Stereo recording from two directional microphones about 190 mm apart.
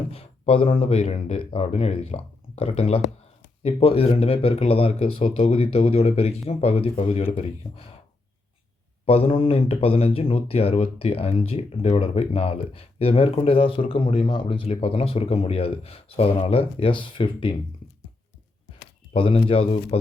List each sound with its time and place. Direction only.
0.1 s speech: 30° left (ahead or behind)
9.0 s speech: 30° left (ahead or behind)
19.1 s speech: 30° left (ahead or behind)